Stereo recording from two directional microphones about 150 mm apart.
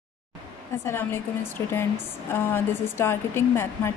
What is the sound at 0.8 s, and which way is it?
A woman's voice, 15° left (ahead or behind).